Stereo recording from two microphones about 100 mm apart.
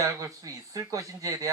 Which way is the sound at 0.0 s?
35° right (ahead or behind).